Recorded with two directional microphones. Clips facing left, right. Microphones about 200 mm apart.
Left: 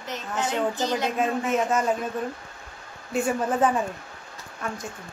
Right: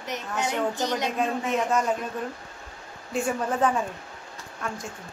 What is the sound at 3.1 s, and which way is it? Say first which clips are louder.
Speech: left 2 dB; centre (ahead or behind).